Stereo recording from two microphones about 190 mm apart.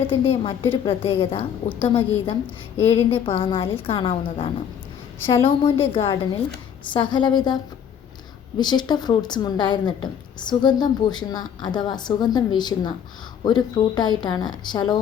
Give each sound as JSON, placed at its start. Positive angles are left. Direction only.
{"t": 0.1, "sound": "a woman's voice", "side_deg": 30}